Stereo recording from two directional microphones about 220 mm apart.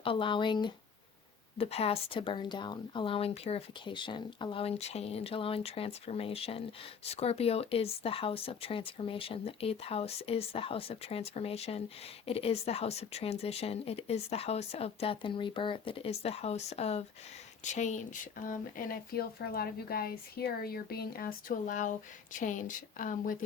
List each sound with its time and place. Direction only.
0.0 s speech: 25° left (ahead or behind)